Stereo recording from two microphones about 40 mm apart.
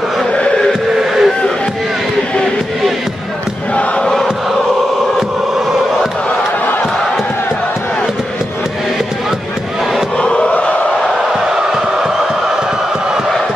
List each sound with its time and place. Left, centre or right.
0.9 s vehicle: centre
4.0 s crowd: centre
10.2 s chant: left